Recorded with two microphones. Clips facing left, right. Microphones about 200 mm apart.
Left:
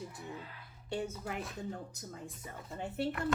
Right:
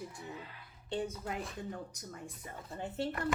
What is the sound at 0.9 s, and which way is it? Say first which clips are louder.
Speech: right 1 dB; 20° right (ahead or behind).